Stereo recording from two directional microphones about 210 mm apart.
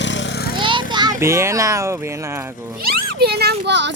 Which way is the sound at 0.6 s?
20° right (ahead or behind).